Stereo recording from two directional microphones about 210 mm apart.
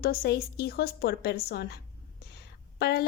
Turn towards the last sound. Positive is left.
turn(degrees=50)  # may be behind; listen again after turning